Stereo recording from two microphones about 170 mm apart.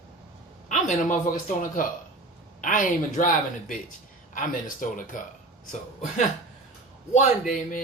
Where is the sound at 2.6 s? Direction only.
50° left (ahead or behind).